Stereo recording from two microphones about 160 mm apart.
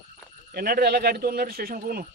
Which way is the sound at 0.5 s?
70° right (ahead or behind).